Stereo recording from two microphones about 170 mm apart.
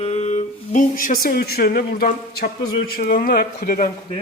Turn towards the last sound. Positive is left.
turn(degrees=50)  # may be behind; listen again after turning